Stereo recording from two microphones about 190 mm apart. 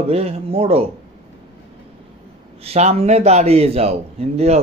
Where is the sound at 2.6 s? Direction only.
35° right (ahead or behind).